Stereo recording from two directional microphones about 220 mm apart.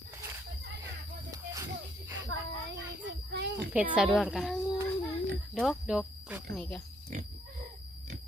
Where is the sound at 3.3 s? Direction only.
50° right (ahead or behind).